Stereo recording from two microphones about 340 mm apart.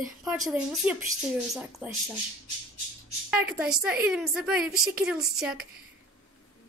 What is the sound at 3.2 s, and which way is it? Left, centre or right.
A woman's voice, centre.